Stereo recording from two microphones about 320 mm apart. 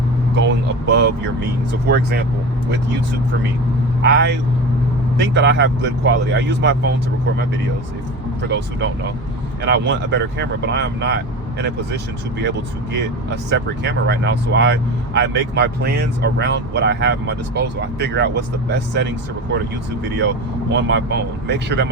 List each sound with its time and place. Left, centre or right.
0.3 s vehicle: right
1.9 s speech: right
4.0 s speech: right
8.4 s speech: right
12.4 s speech: right
20.7 s speech: right